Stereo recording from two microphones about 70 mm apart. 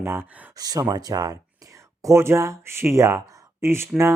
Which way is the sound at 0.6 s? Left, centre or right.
Right.